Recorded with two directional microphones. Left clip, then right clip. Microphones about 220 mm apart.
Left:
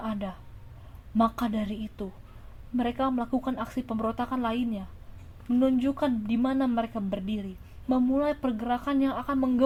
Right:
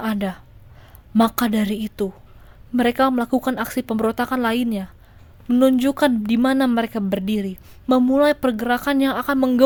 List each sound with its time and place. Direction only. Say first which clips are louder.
0.0 s a woman's voice: right 9 dB; 45° right (ahead or behind)